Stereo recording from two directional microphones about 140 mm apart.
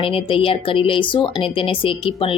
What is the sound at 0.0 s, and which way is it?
A woman's voice, 40° left (ahead or behind).